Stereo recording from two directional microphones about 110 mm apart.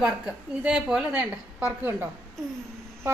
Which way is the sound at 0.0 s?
10° right (ahead or behind).